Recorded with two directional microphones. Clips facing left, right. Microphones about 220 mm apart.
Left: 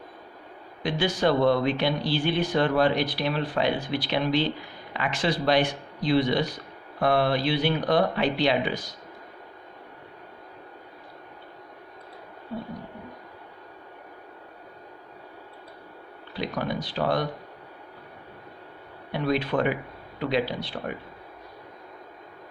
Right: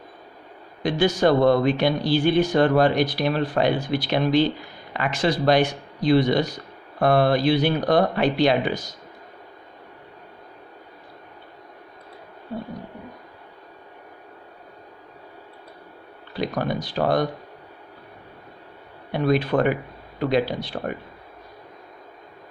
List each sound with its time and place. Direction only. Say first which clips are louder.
0.8 s speech: right 5 dB; 45° right (ahead or behind)
16.4 s speech: right 4 dB; 45° right (ahead or behind)
19.2 s speech: right 5 dB; 45° right (ahead or behind)